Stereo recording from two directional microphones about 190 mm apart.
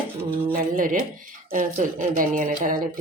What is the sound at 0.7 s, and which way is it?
Speech, 45° right (ahead or behind).